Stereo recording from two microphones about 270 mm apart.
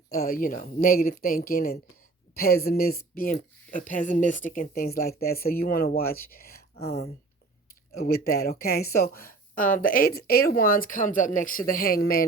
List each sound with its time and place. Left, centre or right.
0.1 s speech: left